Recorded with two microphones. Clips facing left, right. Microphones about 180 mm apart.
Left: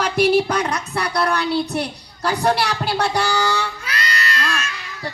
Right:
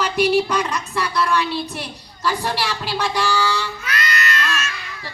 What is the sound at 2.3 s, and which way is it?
Speech, 45° left (ahead or behind).